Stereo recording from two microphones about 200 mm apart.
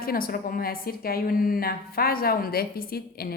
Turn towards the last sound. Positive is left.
turn(degrees=50)  # may be behind; listen again after turning